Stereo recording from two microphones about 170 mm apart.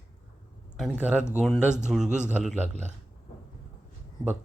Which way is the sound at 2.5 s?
45° right (ahead or behind).